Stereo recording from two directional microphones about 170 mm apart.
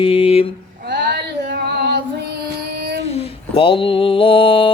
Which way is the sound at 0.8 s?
75° right (ahead or behind).